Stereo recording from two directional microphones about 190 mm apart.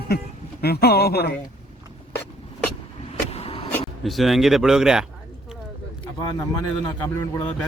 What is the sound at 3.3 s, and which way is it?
Vehicle, 30° left (ahead or behind).